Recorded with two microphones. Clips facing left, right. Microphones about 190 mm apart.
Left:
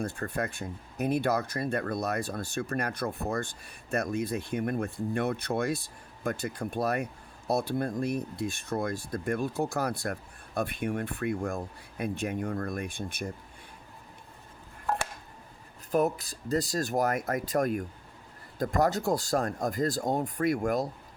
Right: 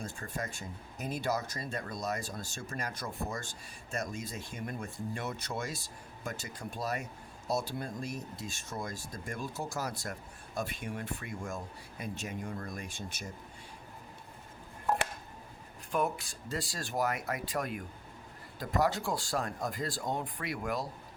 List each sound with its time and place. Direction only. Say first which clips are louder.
0.0 s speech: left 7 dB; 60° left (ahead or behind)
15.9 s speech: left 6 dB; 40° left (ahead or behind)